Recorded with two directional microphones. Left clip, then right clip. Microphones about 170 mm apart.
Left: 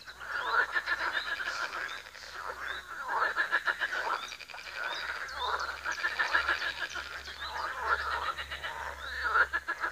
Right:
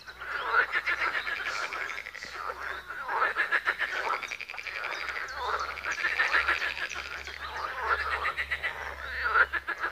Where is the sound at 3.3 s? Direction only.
20° right (ahead or behind).